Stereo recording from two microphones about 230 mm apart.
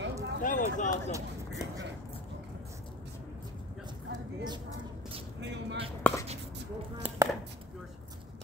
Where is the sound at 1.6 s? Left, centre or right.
Centre.